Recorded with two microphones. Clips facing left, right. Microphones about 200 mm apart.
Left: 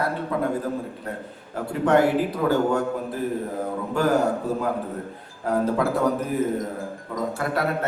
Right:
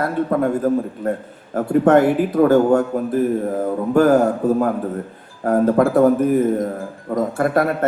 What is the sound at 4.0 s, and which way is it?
A man's voice, 50° right (ahead or behind).